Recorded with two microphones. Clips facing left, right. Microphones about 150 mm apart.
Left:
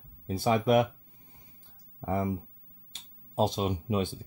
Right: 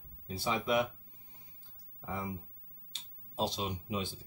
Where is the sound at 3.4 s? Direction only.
55° left (ahead or behind).